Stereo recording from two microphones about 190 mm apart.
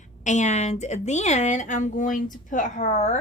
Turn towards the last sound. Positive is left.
turn(degrees=40)  # may be behind; listen again after turning